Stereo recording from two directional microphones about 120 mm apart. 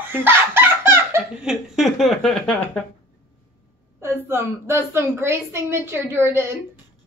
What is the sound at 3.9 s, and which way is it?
A woman's voice, 20° right (ahead or behind).